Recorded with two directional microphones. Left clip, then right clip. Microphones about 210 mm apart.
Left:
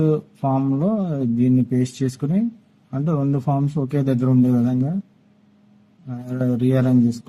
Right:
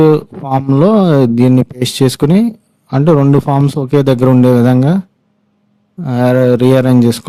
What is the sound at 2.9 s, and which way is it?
Speech, 55° right (ahead or behind).